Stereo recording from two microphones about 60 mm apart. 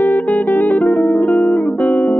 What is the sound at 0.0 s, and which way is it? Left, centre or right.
Music, left.